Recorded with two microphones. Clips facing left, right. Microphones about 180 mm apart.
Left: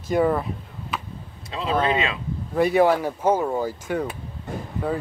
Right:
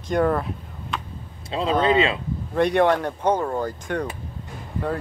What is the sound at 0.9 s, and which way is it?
Vehicle, 5° left (ahead or behind).